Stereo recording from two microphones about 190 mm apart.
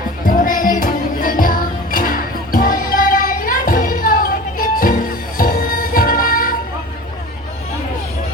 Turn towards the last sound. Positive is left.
turn(degrees=50)  # may be behind; listen again after turning